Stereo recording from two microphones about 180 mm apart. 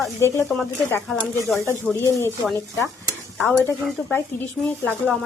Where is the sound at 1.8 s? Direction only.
10° left (ahead or behind).